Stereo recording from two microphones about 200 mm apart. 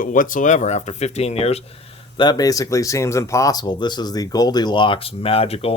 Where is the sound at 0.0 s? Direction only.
40° left (ahead or behind).